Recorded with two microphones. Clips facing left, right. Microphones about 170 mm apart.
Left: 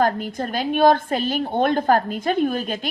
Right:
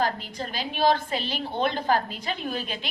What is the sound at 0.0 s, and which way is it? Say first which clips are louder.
A woman's voice: left 7 dB; 50° left (ahead or behind).